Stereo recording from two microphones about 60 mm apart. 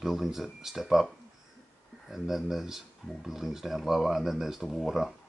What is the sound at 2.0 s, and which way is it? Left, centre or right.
Speech, centre.